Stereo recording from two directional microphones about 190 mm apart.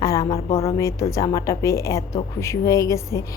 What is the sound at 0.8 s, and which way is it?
A woman's voice, 15° left (ahead or behind).